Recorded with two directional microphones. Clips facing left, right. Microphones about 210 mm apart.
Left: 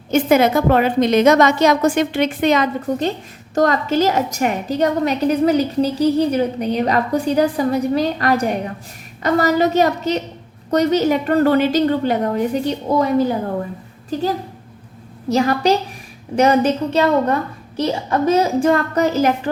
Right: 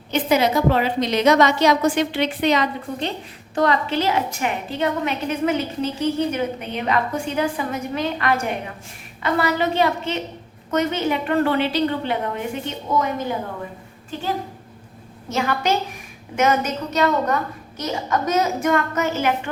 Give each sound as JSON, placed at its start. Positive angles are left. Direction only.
{"t": 0.1, "sound": "a woman's voice", "side_deg": 50}